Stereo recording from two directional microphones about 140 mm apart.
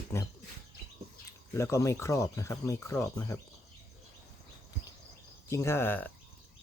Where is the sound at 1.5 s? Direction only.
20° left (ahead or behind).